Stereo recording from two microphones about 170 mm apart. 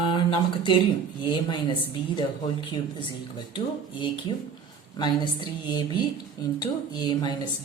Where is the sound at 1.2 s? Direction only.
25° left (ahead or behind).